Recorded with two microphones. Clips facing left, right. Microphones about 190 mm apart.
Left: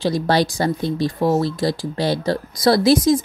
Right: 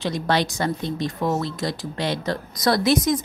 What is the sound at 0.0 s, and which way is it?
Speech, 35° left (ahead or behind).